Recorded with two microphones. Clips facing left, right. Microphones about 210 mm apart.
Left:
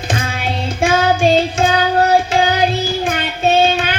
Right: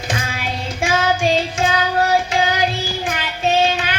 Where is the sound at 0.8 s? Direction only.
30° left (ahead or behind).